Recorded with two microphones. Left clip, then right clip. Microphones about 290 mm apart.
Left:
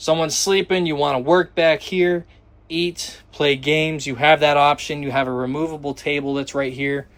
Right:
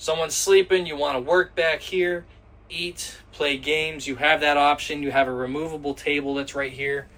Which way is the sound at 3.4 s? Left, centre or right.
Left.